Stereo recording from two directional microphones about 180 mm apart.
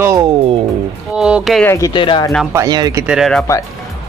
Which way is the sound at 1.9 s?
25° left (ahead or behind).